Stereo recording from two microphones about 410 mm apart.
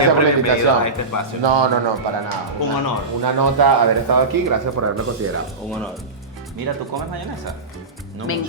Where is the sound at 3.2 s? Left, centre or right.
Right.